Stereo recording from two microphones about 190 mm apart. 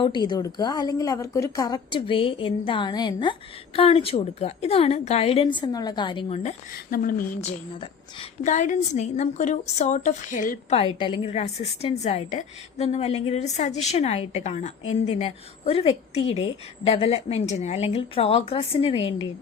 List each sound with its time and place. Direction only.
0.0 s a woman's voice: 25° left (ahead or behind)
6.9 s speech: 50° left (ahead or behind)
8.4 s a woman's voice: 40° left (ahead or behind)
10.8 s a woman's voice: 25° left (ahead or behind)